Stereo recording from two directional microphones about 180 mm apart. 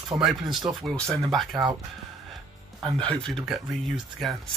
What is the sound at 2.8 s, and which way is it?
Speech, 5° left (ahead or behind).